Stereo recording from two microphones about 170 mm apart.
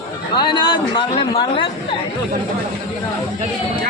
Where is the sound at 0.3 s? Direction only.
25° left (ahead or behind).